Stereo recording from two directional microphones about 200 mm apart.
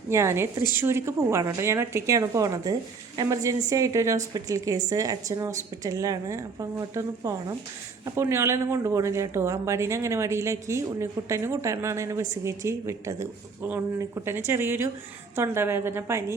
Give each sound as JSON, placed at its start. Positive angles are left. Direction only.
{"t": 0.1, "sound": "speech", "side_deg": -15}